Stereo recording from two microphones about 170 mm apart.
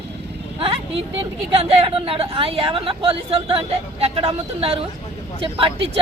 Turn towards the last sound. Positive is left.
turn(degrees=-35)  # may be behind; listen again after turning